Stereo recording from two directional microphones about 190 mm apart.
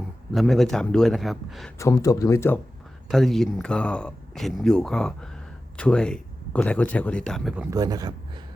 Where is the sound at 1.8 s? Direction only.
15° left (ahead or behind).